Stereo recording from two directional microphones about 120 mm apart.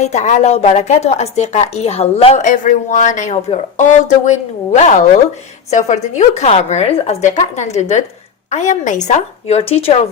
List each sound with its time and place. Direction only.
0.0 s a woman's voice: 75° left (ahead or behind)
8.4 s a woman's voice: 80° left; by 10.1 s 60° left (ahead or behind)